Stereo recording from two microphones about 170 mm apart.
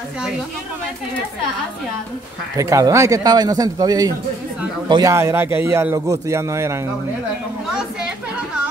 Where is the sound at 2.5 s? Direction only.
20° right (ahead or behind).